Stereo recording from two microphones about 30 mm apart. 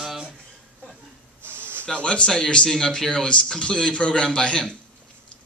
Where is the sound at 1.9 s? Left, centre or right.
Left.